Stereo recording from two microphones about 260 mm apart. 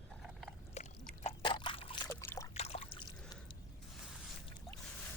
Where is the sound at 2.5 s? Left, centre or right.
Left.